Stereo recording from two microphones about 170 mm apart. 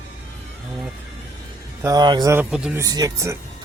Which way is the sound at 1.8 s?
25° right (ahead or behind).